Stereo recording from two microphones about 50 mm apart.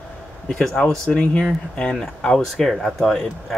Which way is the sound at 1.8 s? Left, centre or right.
Centre.